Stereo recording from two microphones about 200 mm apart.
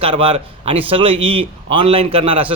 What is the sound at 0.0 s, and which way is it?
A man's voice, 25° right (ahead or behind).